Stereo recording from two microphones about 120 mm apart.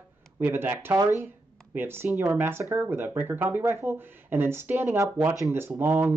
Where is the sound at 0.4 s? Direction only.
15° right (ahead or behind).